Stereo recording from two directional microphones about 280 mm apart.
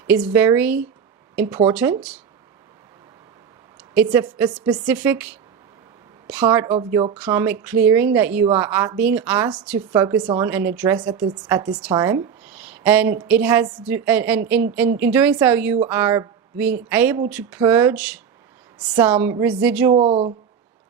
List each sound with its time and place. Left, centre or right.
0.1 s a woman's voice: centre
4.1 s a woman's voice: centre
7.2 s a woman's voice: centre
19.9 s speech: right